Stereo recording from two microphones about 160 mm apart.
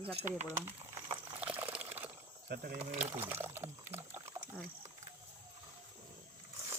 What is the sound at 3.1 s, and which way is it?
Liquid, 15° right (ahead or behind).